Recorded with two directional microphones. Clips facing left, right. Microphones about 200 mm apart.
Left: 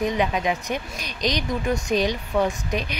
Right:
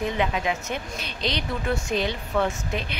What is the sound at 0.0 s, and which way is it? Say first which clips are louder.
Speech: left 3 dB; 20° left (ahead or behind).